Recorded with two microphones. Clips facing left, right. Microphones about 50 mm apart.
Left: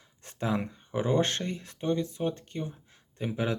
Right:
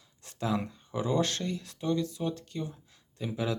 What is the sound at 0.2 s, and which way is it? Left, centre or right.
Speech, left.